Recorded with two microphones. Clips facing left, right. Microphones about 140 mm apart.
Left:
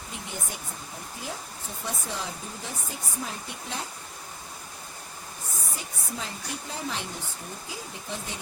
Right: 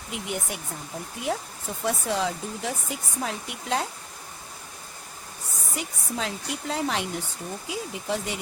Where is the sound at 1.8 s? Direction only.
75° right (ahead or behind).